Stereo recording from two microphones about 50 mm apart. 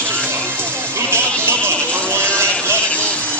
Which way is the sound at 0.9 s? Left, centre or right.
Right.